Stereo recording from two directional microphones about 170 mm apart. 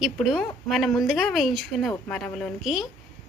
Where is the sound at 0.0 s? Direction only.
Centre (ahead or behind).